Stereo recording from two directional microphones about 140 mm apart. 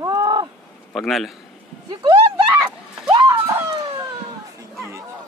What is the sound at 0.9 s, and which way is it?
Speech, centre (ahead or behind).